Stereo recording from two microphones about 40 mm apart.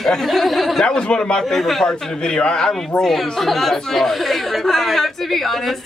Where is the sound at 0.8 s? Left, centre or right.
Left.